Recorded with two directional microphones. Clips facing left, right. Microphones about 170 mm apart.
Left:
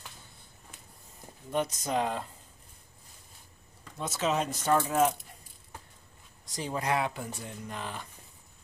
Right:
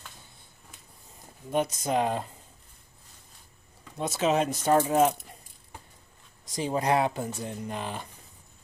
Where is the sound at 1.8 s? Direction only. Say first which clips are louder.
Right 4 dB; 20° right (ahead or behind).